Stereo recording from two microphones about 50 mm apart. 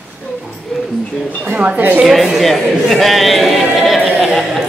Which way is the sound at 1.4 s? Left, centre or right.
Right.